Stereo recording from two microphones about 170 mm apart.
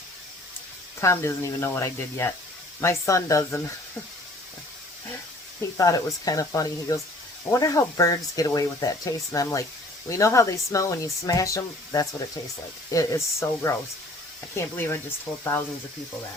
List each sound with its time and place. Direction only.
1.0 s speech: 15° left (ahead or behind)
5.7 s speech: 20° left (ahead or behind)